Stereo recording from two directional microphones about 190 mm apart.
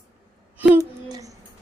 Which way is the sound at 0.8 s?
15° right (ahead or behind).